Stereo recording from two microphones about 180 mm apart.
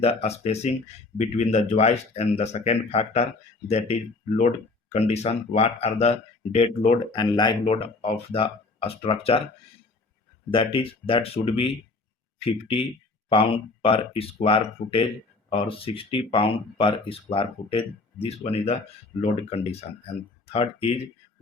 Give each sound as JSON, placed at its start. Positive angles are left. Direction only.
{"t": 0.0, "sound": "speech", "side_deg": 35}
{"t": 10.5, "sound": "speech", "side_deg": 30}